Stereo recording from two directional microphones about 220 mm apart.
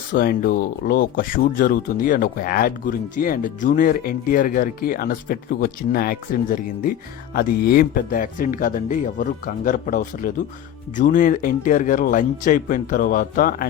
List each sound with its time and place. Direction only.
0.1 s speech: 40° left (ahead or behind)